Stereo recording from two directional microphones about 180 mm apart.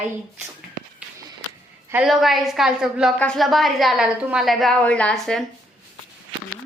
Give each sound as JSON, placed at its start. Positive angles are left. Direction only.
{"t": 1.9, "sound": "a woman's voice", "side_deg": -5}